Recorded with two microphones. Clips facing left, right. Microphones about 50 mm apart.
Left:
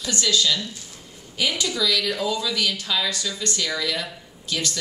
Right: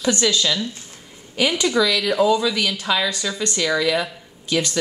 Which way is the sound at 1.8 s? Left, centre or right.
Right.